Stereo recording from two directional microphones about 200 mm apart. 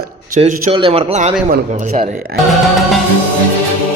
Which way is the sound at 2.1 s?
Centre (ahead or behind).